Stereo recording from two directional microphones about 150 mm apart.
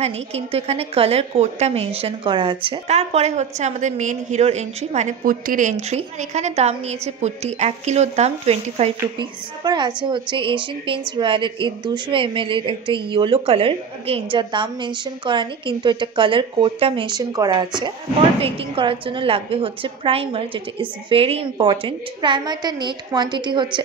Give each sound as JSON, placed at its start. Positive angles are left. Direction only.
{"t": 0.0, "sound": "a woman's voice", "side_deg": -45}
{"t": 2.9, "sound": "a woman's voice", "side_deg": -45}
{"t": 5.2, "sound": "a woman's voice", "side_deg": -70}
{"t": 9.6, "sound": "a woman's voice", "side_deg": -25}